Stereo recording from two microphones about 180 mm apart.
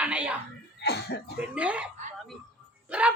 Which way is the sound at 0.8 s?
65° left (ahead or behind).